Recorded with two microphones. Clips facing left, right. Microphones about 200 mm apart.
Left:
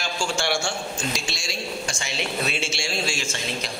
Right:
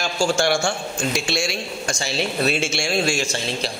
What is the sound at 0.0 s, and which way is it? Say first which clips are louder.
A man's voice: right 7 dB; 45° right (ahead or behind).